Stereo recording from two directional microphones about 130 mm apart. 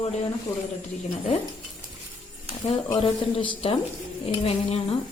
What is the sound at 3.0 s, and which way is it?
Speech, 45° left (ahead or behind).